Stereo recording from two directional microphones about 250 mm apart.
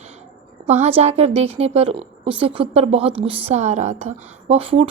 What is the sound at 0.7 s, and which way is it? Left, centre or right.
A woman's voice, right.